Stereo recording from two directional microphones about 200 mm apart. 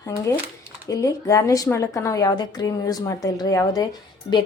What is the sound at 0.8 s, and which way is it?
A woman's voice, 15° left (ahead or behind).